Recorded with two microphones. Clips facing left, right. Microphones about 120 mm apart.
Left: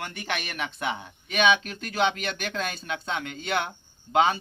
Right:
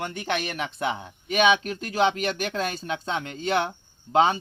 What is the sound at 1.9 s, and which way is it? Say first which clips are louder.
Speech: right 3 dB; 35° right (ahead or behind).